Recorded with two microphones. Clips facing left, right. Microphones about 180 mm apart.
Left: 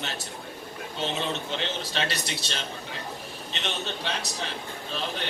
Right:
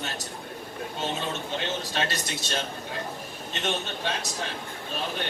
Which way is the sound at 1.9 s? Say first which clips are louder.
Right 1 dB; 45° right (ahead or behind).